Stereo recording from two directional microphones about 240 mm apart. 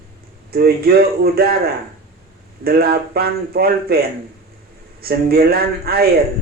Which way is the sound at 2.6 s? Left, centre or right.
Right.